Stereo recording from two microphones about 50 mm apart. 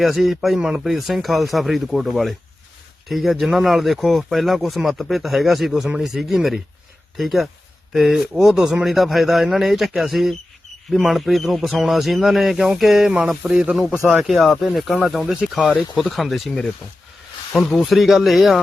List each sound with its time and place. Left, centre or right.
0.0 s speech: centre
14.1 s speech: centre
17.5 s speech: centre